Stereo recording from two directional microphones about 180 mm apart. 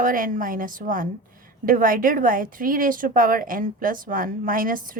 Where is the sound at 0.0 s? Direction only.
50° right (ahead or behind).